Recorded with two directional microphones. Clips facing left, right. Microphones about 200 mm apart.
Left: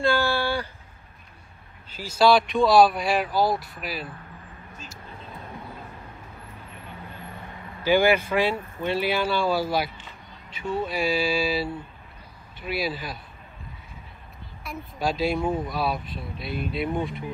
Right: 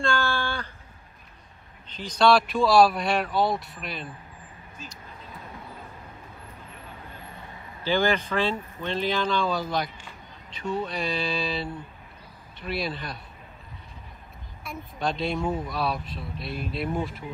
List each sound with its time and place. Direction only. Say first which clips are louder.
0.1 s a sound: left 4 dB; 15° left (ahead or behind)
1.9 s speech: left 1 dB; 5° left (ahead or behind)
7.8 s speech: left 4 dB; 15° left (ahead or behind)
14.6 s speech: left 2 dB; centre (ahead or behind)
15.4 s speech: left 2 dB; 20° left (ahead or behind)
15.7 s speech: left 1 dB; centre (ahead or behind)